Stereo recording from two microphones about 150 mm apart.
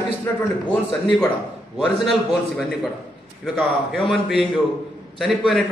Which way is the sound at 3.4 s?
Centre (ahead or behind).